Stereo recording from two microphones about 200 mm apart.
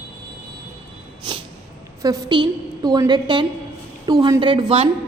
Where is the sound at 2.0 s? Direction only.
15° right (ahead or behind).